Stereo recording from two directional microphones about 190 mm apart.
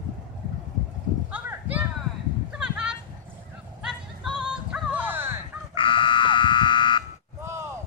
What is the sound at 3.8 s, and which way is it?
Music, 5° right (ahead or behind).